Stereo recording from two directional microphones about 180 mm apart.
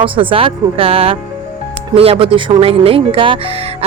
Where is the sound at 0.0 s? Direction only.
30° right (ahead or behind).